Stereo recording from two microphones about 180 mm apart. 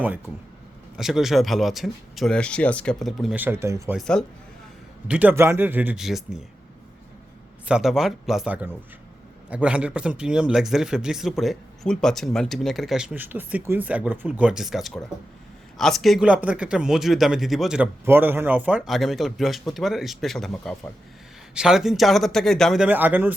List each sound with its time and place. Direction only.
0.9 s speech: centre (ahead or behind)
3.9 s speech: 5° left (ahead or behind)
5.0 s speech: 10° right (ahead or behind)
7.7 s speech: centre (ahead or behind)